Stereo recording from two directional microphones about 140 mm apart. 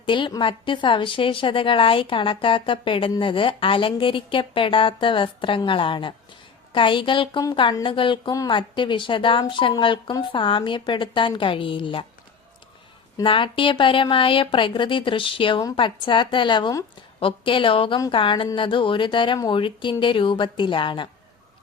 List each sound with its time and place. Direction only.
0.0 s a woman's voice: 35° left (ahead or behind)
13.2 s a woman's voice: 40° left (ahead or behind)